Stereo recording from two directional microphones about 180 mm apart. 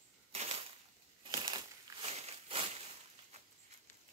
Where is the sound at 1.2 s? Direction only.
25° right (ahead or behind).